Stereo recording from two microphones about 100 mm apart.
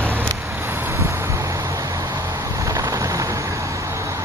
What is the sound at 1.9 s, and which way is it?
Vehicle, 45° right (ahead or behind).